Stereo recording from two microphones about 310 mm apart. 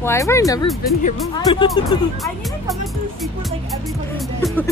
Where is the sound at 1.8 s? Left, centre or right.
Centre.